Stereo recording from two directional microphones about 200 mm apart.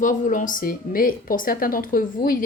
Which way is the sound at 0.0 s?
40° left (ahead or behind).